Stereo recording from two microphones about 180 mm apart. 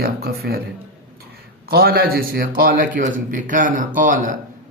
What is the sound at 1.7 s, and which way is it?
A man's voice, 60° right (ahead or behind).